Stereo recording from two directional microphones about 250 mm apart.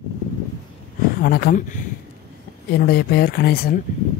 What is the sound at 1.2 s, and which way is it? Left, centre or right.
Speech, left.